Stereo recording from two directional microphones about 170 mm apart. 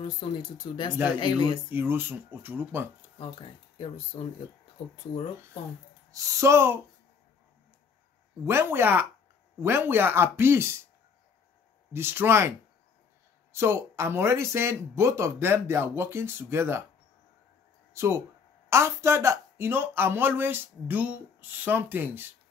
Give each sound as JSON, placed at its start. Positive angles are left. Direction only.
{"t": 0.0, "sound": "speech", "side_deg": 30}
{"t": 1.7, "sound": "speech", "side_deg": -10}
{"t": 3.2, "sound": "speech", "side_deg": 30}
{"t": 6.1, "sound": "speech", "side_deg": -20}
{"t": 8.5, "sound": "speech", "side_deg": -15}
{"t": 11.9, "sound": "speech", "side_deg": -15}
{"t": 17.9, "sound": "speech", "side_deg": -15}